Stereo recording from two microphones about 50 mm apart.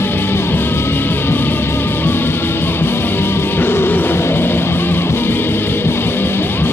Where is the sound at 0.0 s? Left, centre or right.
Left.